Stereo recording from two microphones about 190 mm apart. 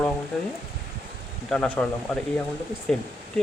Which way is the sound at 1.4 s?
5° left (ahead or behind).